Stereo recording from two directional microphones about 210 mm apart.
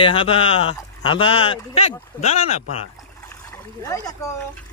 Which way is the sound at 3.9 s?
15° left (ahead or behind).